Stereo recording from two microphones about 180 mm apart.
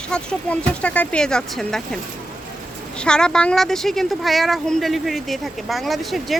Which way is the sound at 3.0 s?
5° left (ahead or behind).